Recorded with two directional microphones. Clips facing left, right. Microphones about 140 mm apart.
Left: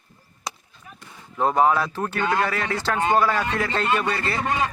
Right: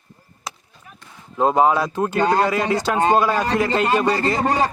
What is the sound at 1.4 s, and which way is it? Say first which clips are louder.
Speech: right 3 dB; 20° right (ahead or behind).